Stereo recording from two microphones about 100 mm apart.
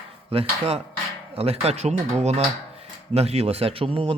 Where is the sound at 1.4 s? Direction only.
85° right.